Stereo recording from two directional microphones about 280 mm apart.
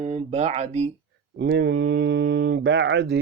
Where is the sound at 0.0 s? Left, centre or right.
Right.